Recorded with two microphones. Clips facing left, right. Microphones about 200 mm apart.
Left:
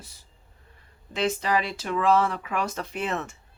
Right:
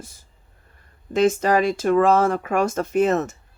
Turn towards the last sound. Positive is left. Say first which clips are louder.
# right 11 dB
turn(degrees=-40)  # may be behind; listen again after turning